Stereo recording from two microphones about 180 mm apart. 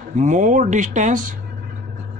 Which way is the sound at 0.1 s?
45° right (ahead or behind).